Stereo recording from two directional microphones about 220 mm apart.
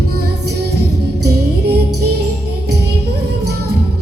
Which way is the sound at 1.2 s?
50° right (ahead or behind).